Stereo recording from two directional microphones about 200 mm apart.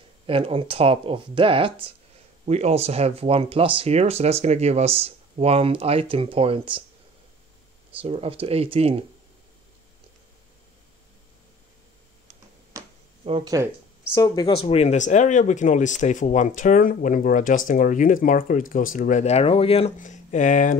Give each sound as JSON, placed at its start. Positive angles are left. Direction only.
{"t": 0.3, "sound": "speech", "side_deg": -25}
{"t": 8.0, "sound": "speech", "side_deg": -30}
{"t": 12.7, "sound": "a sound", "side_deg": -15}
{"t": 13.2, "sound": "speech", "side_deg": -25}
{"t": 14.1, "sound": "speech", "side_deg": 20}